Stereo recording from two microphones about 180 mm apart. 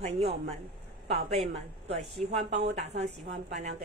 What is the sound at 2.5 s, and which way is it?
Speech, 70° right (ahead or behind).